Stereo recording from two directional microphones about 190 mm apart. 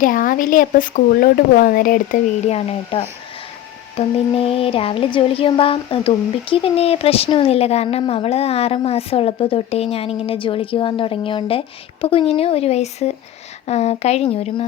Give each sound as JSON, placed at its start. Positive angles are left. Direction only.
{"t": 0.0, "sound": "speech", "side_deg": 45}
{"t": 2.4, "sound": "speech", "side_deg": 35}
{"t": 3.9, "sound": "a sound", "side_deg": 30}
{"t": 12.0, "sound": "speech", "side_deg": 30}